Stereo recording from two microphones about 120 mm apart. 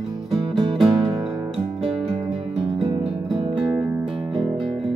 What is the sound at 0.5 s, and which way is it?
Music, 40° right (ahead or behind).